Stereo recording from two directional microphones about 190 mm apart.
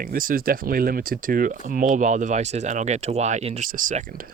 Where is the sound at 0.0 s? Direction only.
45° right (ahead or behind).